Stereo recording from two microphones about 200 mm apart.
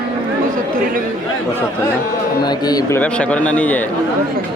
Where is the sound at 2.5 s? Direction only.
20° left (ahead or behind).